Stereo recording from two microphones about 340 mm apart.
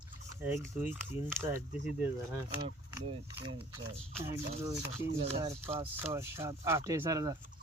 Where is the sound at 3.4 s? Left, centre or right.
Centre.